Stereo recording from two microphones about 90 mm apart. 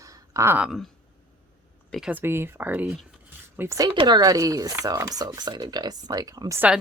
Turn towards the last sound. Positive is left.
turn(degrees=-45)  # may be behind; listen again after turning